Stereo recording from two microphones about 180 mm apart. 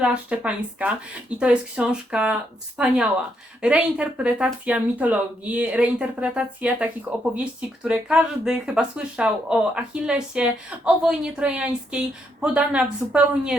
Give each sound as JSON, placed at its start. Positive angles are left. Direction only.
{"t": 0.0, "sound": "speech", "side_deg": -5}